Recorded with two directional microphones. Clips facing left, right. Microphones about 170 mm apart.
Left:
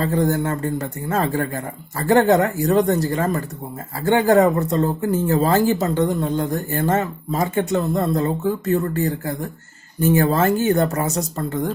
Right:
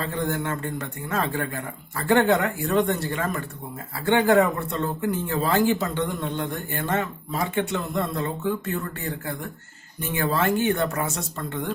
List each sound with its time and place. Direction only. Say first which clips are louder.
0.0 s speech: left 7 dB; 40° left (ahead or behind)